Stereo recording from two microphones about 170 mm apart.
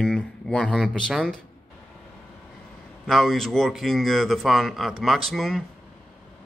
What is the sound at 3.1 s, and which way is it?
Speech, centre (ahead or behind).